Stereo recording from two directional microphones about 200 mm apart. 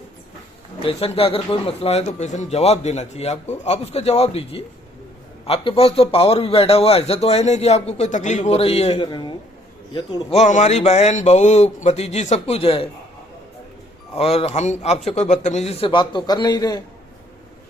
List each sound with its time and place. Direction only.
0.8 s a man's voice: 30° left (ahead or behind)
14.2 s a man's voice: 30° left (ahead or behind)